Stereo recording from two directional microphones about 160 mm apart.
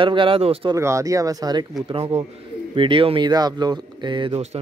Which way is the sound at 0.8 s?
20° right (ahead or behind).